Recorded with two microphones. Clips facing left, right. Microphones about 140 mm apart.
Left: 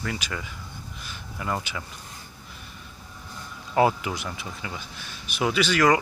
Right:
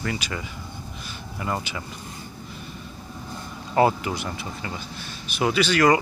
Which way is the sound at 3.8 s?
Centre (ahead or behind).